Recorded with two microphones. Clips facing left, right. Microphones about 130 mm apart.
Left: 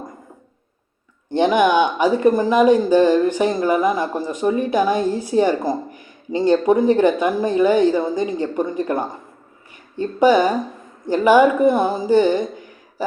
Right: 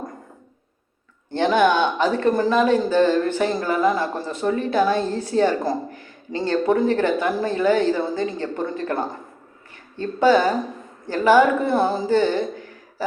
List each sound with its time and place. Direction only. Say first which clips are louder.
1.3 s speech: left 2 dB; 15° left (ahead or behind)